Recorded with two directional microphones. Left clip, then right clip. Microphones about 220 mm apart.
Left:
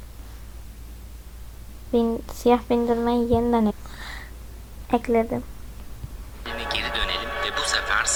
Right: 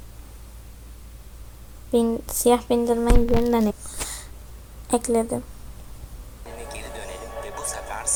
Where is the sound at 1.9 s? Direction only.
5° right (ahead or behind).